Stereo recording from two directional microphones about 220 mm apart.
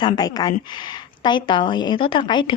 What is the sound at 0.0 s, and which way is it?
Speech, 15° left (ahead or behind).